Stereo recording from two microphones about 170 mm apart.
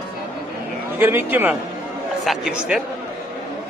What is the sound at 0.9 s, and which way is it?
Speech, 15° right (ahead or behind).